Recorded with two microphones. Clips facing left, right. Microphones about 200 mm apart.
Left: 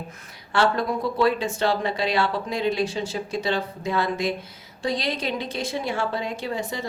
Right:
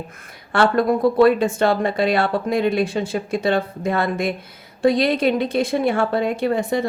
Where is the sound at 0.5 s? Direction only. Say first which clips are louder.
Right 5 dB; 55° right (ahead or behind).